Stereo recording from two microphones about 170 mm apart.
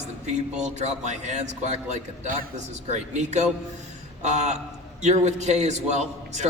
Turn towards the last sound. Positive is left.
turn(degrees=-40)  # may be behind; listen again after turning